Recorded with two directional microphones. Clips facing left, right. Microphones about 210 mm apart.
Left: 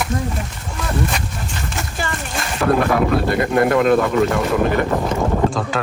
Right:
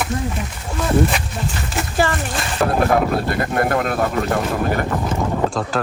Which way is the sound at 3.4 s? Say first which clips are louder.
Left 6 dB; 50° right (ahead or behind).